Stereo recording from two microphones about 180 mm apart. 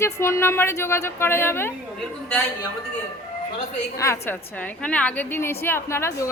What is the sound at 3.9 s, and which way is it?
A woman's voice, 15° left (ahead or behind).